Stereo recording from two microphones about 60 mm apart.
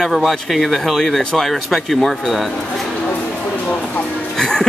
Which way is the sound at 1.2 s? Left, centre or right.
Centre.